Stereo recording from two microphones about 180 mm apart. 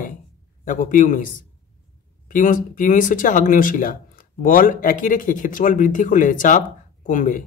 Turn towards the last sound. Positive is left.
turn(degrees=45)  # may be behind; listen again after turning